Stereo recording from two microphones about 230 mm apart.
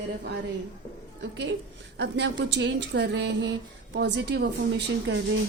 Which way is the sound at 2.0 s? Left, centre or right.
Right.